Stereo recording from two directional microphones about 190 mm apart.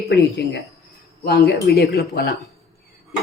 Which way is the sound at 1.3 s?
60° left (ahead or behind).